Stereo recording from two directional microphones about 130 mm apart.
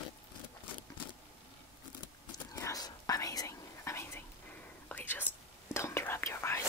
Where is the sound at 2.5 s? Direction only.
25° left (ahead or behind).